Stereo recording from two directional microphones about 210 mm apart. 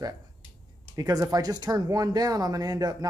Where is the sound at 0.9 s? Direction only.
15° right (ahead or behind).